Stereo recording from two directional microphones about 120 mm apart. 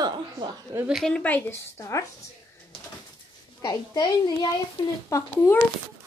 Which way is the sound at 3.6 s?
35° left (ahead or behind).